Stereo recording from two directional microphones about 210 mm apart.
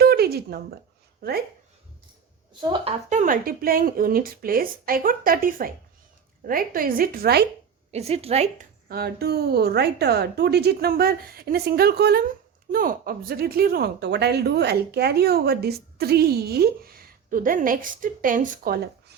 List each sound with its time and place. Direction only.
0.0 s a sound: 45° right (ahead or behind)
1.2 s speech: 45° right (ahead or behind)
2.5 s speech: 20° right (ahead or behind)
3.1 s speech: 40° right (ahead or behind)
7.9 s speech: 30° right (ahead or behind)
8.9 s speech: 50° right (ahead or behind)